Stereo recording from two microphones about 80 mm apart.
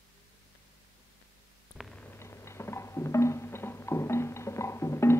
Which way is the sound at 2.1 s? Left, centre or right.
Left.